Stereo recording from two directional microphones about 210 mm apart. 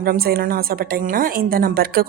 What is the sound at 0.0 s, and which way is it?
A woman's voice, 45° right (ahead or behind).